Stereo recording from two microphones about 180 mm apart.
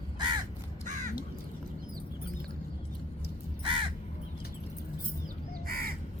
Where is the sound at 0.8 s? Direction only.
45° right (ahead or behind).